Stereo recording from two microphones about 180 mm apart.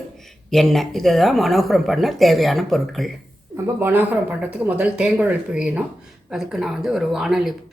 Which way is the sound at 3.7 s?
10° right (ahead or behind).